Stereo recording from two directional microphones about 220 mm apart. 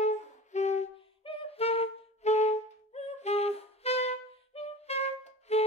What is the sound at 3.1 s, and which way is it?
Music, 30° left (ahead or behind).